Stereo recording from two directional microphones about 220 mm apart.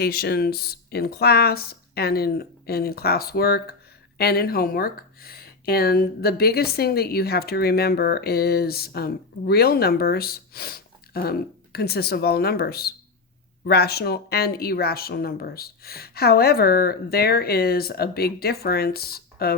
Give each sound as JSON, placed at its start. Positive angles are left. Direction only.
{"t": 0.0, "sound": "speech", "side_deg": 45}